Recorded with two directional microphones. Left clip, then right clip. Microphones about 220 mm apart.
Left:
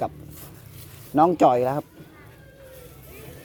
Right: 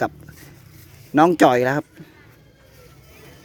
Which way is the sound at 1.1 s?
35° right (ahead or behind).